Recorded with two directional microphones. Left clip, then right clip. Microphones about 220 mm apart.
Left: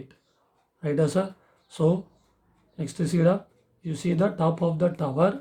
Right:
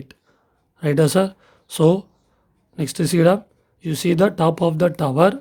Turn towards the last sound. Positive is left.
turn(degrees=-45)  # may be behind; listen again after turning